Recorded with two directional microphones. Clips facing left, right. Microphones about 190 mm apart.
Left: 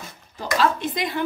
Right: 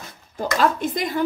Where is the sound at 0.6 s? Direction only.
45° right (ahead or behind).